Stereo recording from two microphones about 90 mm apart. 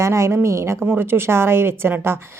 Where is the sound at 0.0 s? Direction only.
35° right (ahead or behind).